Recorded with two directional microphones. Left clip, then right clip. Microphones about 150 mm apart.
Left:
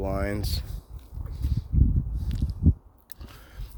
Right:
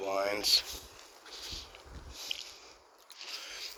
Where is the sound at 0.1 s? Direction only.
50° left (ahead or behind).